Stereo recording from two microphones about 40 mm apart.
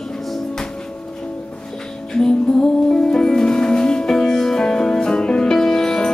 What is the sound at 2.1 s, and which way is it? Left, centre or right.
Music, centre.